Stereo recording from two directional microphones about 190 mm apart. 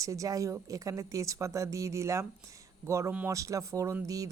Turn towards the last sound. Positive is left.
turn(degrees=-20)  # may be behind; listen again after turning